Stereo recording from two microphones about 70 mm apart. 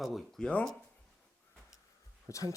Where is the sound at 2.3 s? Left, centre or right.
Left.